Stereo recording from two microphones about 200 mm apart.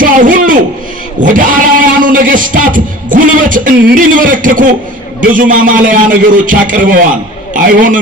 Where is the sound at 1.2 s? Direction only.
40° right (ahead or behind).